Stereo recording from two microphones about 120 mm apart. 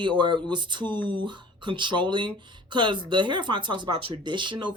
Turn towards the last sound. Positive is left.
turn(degrees=-40)  # may be behind; listen again after turning